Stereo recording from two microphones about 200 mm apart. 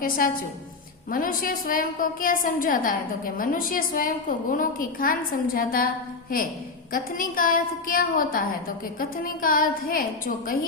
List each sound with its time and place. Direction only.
0.0 s a woman's voice: 45° left (ahead or behind)
6.9 s a woman's voice: 45° left (ahead or behind)